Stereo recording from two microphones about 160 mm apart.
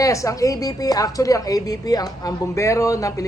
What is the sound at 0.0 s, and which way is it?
A woman's voice, 20° left (ahead or behind).